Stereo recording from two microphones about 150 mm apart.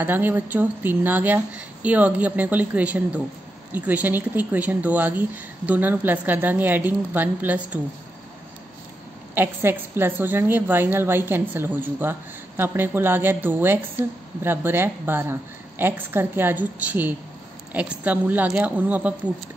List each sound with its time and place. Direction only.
0.0 s a woman's voice: 15° right (ahead or behind)
9.3 s a woman's voice: 15° right (ahead or behind)